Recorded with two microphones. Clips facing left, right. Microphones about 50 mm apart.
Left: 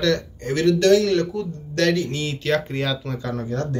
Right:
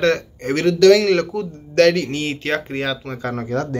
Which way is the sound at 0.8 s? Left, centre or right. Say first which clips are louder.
Right 7 dB; right.